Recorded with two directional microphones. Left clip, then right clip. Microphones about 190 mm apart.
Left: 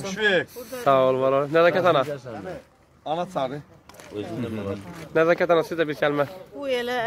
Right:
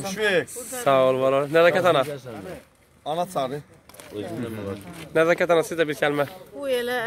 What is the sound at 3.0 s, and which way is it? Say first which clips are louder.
Speech: right 1 dB; 65° right (ahead or behind).